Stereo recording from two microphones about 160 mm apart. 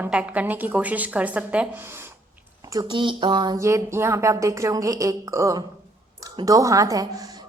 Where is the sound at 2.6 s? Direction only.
25° right (ahead or behind).